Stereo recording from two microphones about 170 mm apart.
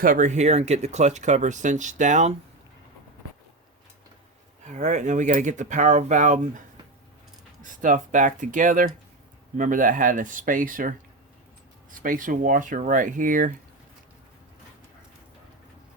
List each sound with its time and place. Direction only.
0.0 s speech: 50° right (ahead or behind)
4.6 s speech: 45° right (ahead or behind)
7.6 s speech: 50° right (ahead or behind)